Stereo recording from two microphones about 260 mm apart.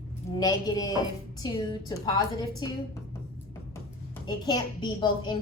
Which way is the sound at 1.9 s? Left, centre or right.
Centre.